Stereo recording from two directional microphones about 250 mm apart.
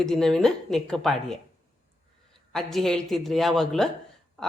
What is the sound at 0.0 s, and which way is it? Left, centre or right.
A woman's voice, centre.